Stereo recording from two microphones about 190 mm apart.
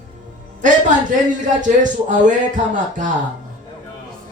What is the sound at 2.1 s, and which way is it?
Speech, 40° right (ahead or behind).